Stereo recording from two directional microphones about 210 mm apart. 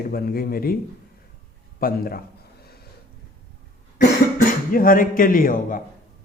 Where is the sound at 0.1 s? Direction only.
45° left (ahead or behind).